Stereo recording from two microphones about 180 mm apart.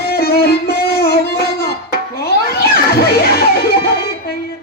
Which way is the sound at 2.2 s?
60° left (ahead or behind).